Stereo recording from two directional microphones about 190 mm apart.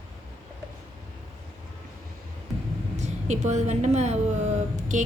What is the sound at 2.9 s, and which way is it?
A woman's voice, 35° right (ahead or behind).